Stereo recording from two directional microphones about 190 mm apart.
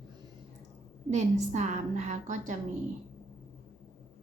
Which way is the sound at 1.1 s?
40° right (ahead or behind).